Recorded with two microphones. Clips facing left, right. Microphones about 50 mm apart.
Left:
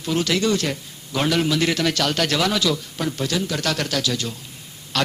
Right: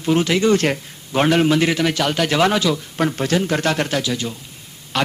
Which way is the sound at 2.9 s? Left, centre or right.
Right.